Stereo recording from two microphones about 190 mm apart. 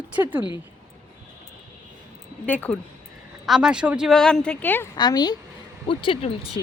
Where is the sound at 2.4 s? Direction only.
10° left (ahead or behind).